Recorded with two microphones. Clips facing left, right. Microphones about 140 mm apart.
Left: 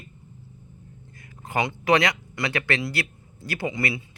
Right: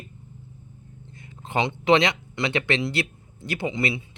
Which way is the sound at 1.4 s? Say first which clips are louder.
Right 1 dB; 25° right (ahead or behind).